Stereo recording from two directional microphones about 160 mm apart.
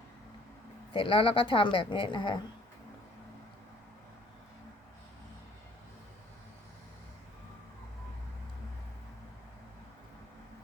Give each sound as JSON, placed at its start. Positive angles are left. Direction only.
{"t": 0.9, "sound": "speech", "side_deg": 35}